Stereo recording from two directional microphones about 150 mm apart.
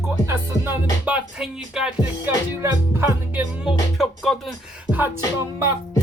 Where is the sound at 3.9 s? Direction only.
Centre (ahead or behind).